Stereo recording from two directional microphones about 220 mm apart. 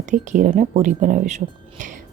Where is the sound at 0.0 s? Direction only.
35° right (ahead or behind).